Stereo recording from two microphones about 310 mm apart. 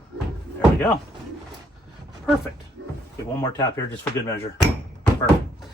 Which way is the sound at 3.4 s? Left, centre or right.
Centre.